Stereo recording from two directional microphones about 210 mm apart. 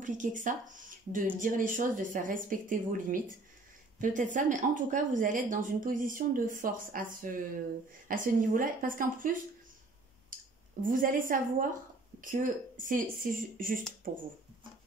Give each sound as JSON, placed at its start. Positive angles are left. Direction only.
{"t": 0.0, "sound": "speech", "side_deg": -35}